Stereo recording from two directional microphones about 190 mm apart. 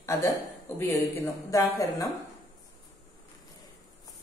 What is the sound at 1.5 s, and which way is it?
Speech, 15° left (ahead or behind).